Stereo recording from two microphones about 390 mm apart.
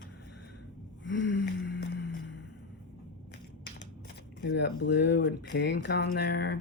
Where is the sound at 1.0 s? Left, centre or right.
Left.